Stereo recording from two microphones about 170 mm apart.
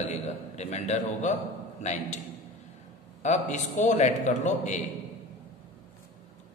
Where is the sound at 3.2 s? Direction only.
45° left (ahead or behind).